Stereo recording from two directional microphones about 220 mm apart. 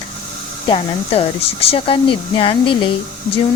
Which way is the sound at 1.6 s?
25° left (ahead or behind).